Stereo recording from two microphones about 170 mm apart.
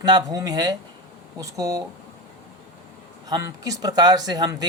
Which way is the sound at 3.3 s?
20° right (ahead or behind).